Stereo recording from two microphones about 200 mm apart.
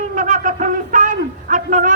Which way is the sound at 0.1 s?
40° right (ahead or behind).